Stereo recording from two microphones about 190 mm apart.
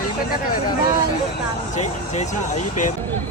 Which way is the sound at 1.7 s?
35° left (ahead or behind).